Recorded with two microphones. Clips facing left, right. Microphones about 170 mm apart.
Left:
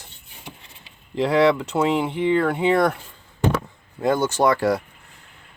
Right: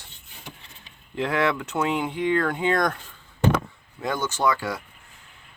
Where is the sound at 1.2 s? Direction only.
35° left (ahead or behind).